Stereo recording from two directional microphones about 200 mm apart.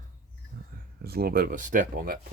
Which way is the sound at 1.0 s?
50° right (ahead or behind).